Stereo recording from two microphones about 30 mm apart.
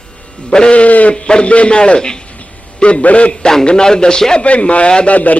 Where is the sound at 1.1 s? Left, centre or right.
Left.